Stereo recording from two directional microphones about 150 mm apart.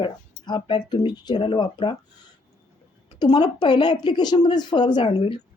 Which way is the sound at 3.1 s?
30° left (ahead or behind).